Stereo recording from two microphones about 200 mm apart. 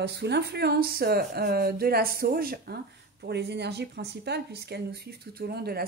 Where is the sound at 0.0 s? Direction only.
55° right (ahead or behind).